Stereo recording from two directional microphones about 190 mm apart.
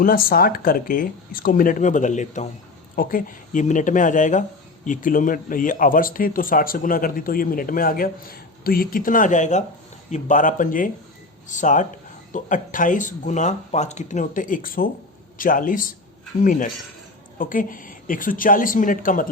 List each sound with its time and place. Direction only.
0.0 s speech: 50° left (ahead or behind)